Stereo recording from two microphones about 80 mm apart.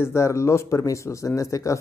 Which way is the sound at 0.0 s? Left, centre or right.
Left.